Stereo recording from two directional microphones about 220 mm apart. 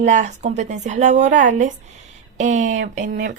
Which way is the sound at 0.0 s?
35° right (ahead or behind).